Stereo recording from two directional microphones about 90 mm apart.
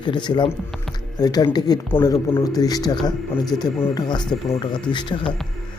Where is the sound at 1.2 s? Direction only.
45° left (ahead or behind).